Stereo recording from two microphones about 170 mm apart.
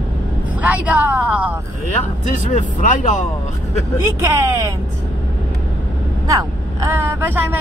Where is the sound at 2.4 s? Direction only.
45° left (ahead or behind).